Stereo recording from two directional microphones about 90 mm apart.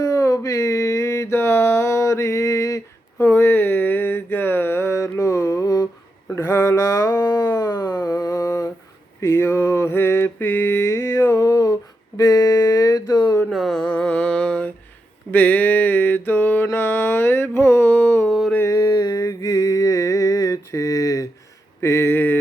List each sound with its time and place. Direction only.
0.0 s a sound: 40° left (ahead or behind)
3.2 s mantra: 25° left (ahead or behind); by 5.9 s 40° left (ahead or behind)
6.3 s a sound: 30° left (ahead or behind)
9.2 s mantra: 30° left (ahead or behind); by 13.3 s 50° left (ahead or behind)
13.5 s music: centre (ahead or behind)
13.8 s mantra: 15° left (ahead or behind)
18.3 s mantra: centre (ahead or behind)
18.6 s music: 40° left (ahead or behind)
21.8 s a sound: 30° left (ahead or behind)